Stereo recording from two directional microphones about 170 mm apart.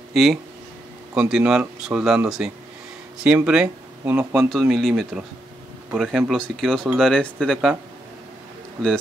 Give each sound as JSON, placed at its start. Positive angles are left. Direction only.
{"t": 0.1, "sound": "speech", "side_deg": 0}